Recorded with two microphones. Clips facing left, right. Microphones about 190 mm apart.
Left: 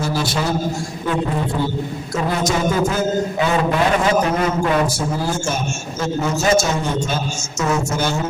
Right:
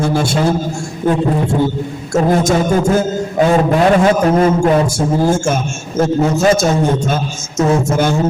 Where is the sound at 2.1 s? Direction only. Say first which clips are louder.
Right 7 dB; 45° right (ahead or behind).